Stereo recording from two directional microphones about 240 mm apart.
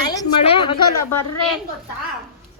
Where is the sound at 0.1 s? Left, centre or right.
Centre.